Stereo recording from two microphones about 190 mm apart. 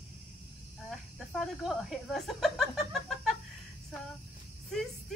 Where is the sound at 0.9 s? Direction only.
Centre (ahead or behind).